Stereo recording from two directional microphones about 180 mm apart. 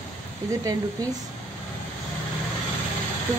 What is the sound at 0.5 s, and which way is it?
Speech, 20° right (ahead or behind).